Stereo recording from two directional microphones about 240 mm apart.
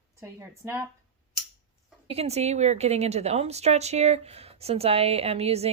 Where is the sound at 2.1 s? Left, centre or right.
Right.